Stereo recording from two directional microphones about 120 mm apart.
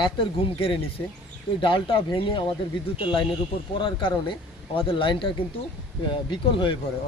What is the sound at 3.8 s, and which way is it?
Speech, 45° left (ahead or behind).